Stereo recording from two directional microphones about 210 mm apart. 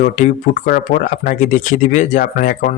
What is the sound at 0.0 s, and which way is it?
Speech, 35° left (ahead or behind).